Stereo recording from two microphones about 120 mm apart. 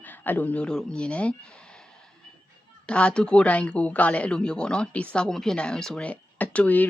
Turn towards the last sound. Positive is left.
turn(degrees=15)  # may be behind; listen again after turning